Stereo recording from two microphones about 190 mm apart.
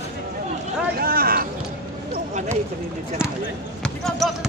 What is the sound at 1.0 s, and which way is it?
Speech, 50° right (ahead or behind).